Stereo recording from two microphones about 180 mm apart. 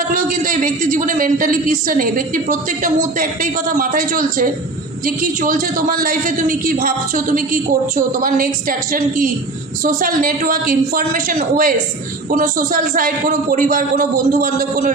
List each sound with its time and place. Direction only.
0.1 s a man's voice: 50° right (ahead or behind)